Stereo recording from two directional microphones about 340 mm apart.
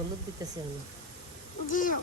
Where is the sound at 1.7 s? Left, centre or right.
Left.